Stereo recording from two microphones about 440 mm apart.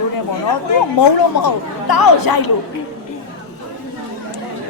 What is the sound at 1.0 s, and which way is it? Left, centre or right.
Speech, left.